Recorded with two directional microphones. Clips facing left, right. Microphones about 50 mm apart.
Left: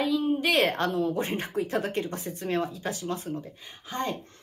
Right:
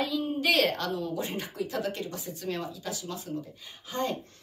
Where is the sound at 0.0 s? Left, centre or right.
Left.